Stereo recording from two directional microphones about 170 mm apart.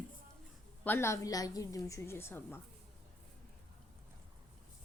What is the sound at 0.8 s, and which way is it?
A woman's voice, 15° left (ahead or behind).